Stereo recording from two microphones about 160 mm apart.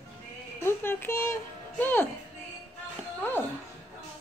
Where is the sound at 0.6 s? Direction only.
15° left (ahead or behind).